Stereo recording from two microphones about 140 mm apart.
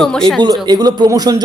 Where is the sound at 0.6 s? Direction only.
30° right (ahead or behind).